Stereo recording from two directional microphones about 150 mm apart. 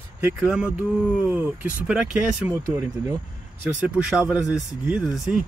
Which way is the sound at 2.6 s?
20° right (ahead or behind).